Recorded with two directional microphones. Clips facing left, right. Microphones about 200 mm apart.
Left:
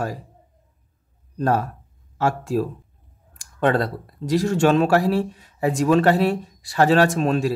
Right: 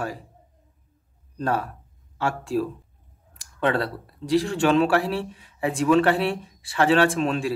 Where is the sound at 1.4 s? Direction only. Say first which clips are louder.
Left 4 dB; 40° left (ahead or behind).